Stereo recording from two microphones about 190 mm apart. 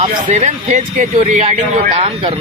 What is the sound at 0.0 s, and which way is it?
Speech, 40° right (ahead or behind).